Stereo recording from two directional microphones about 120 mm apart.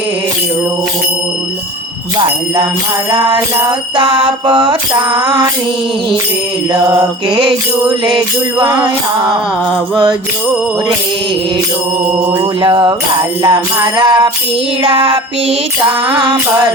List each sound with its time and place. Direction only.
3.7 s music: 45° right (ahead or behind)
7.3 s music: 45° right (ahead or behind)
8.7 s music: 30° right (ahead or behind)
12.6 s music: 45° right (ahead or behind)